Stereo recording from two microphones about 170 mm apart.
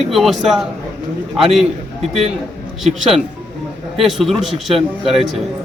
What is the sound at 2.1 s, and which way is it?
Speech, 40° right (ahead or behind).